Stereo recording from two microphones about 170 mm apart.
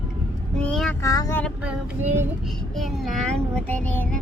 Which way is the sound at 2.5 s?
Centre (ahead or behind).